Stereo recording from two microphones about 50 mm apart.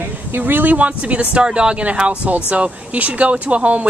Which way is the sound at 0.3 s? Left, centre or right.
Right.